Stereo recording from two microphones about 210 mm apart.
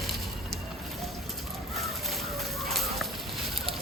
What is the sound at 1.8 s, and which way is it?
Chicken, centre (ahead or behind).